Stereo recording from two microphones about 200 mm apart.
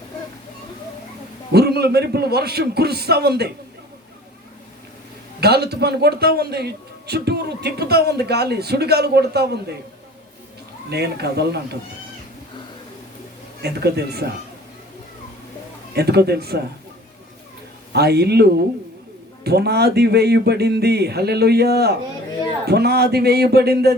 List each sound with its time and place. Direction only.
1.5 s a man's voice: 55° right (ahead or behind)
5.4 s a man's voice: 55° right (ahead or behind)
10.8 s speech: 55° right (ahead or behind)
13.6 s a man's voice: 55° right (ahead or behind)
16.0 s a man's voice: 55° right (ahead or behind)
17.9 s a man's voice: 55° right (ahead or behind)